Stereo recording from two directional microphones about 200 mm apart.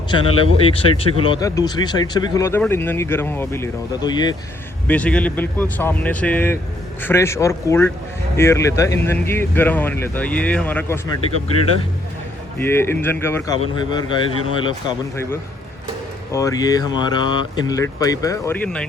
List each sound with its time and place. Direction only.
0.1 s speech: 30° left (ahead or behind)
4.9 s speech: 5° left (ahead or behind)
12.5 s speech: 10° left (ahead or behind)
13.6 s speech: 20° left (ahead or behind); by 18.9 s 5° left (ahead or behind)